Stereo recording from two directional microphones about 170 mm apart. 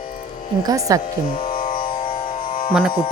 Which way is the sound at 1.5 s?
55° left (ahead or behind).